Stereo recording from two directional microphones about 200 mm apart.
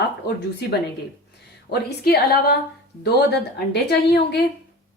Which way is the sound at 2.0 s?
50° left (ahead or behind).